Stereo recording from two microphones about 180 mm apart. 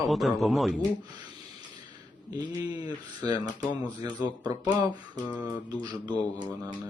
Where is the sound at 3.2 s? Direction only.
20° right (ahead or behind).